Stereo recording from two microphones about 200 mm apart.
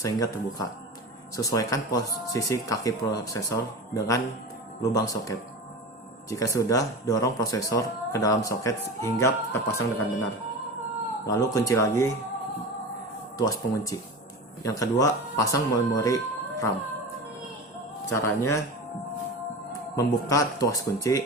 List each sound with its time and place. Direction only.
0.0 s speech: 15° left (ahead or behind)
6.3 s speech: 15° left (ahead or behind)
11.3 s speech: 15° left (ahead or behind)
13.3 s speech: 20° left (ahead or behind)
18.1 s speech: 15° left (ahead or behind)
20.0 s speech: 15° left (ahead or behind)